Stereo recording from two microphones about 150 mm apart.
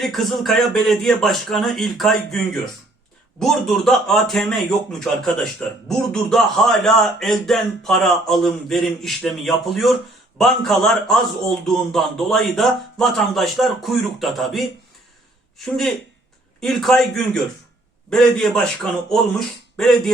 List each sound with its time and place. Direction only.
0.0 s a man's voice: centre (ahead or behind)
19.7 s a man's voice: centre (ahead or behind)